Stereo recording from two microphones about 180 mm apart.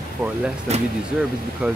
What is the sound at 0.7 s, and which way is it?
Speech, 35° right (ahead or behind).